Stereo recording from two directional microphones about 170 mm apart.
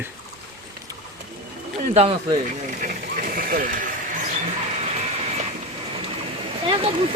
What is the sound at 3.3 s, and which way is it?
Vehicle, 55° right (ahead or behind).